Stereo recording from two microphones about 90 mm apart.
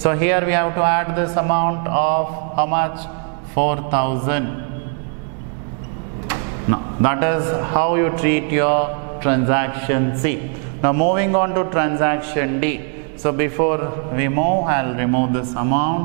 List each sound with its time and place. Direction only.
0.0 s a man's voice: 10° right (ahead or behind)
6.2 s a man's voice: 10° right (ahead or behind)